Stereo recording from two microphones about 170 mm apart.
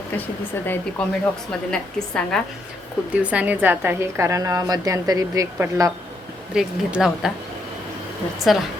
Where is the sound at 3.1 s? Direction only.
5° right (ahead or behind).